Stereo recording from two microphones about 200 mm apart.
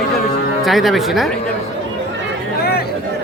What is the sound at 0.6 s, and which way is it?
Speech, centre (ahead or behind).